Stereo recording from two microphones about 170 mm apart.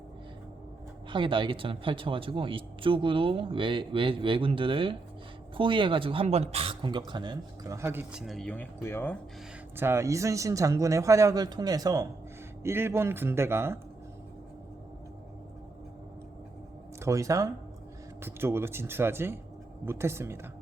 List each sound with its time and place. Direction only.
1.1 s speech: 30° right (ahead or behind); by 8.2 s 15° right (ahead or behind)
8.2 s speech: centre (ahead or behind)
9.7 s speech: 15° right (ahead or behind)
17.0 s speech: 20° right (ahead or behind)